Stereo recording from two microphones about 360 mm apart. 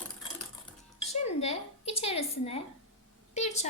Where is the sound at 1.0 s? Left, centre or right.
Centre.